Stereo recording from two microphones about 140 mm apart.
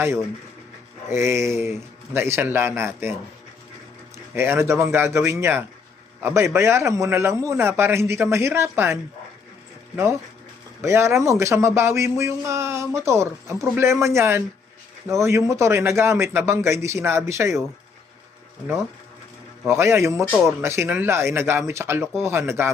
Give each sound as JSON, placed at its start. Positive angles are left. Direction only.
{"t": 1.1, "sound": "speech", "side_deg": -20}
{"t": 4.4, "sound": "speech", "side_deg": -20}
{"t": 19.6, "sound": "speech", "side_deg": -20}